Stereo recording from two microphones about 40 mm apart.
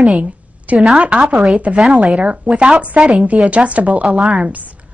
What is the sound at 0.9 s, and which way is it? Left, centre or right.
A woman's voice, right.